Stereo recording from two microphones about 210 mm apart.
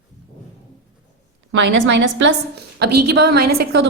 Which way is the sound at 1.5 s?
60° right (ahead or behind).